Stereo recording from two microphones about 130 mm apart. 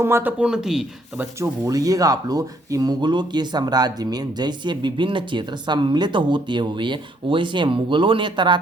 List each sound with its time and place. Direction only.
0.0 s speech: 15° right (ahead or behind)
1.2 s speech: 25° right (ahead or behind)